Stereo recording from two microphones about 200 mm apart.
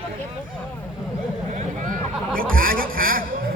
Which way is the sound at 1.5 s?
40° right (ahead or behind).